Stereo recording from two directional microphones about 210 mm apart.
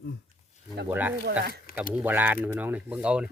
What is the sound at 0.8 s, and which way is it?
Speech, 10° right (ahead or behind).